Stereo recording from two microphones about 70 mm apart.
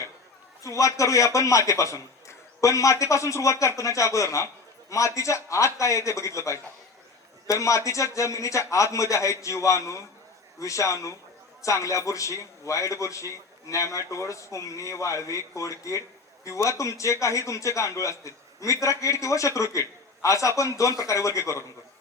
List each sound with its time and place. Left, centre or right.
0.6 s a man's voice: left